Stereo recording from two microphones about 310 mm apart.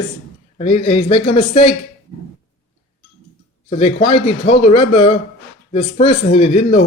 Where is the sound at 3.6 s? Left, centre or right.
Centre.